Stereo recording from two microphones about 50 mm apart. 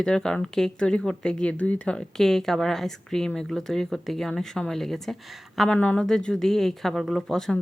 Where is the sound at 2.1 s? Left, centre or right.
Centre.